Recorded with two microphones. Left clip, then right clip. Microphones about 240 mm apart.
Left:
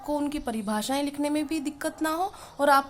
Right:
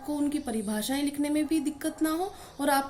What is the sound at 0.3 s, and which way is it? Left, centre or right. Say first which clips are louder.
A woman's voice: left 1 dB; left.